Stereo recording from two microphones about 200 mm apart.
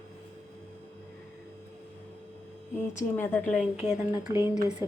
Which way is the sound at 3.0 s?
10° left (ahead or behind).